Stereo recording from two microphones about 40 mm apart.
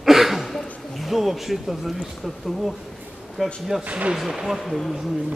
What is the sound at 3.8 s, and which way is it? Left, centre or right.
Speech, right.